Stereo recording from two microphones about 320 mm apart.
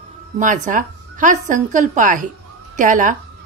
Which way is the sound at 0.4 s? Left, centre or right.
Right.